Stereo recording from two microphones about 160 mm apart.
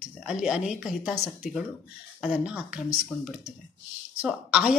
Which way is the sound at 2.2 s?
5° right (ahead or behind).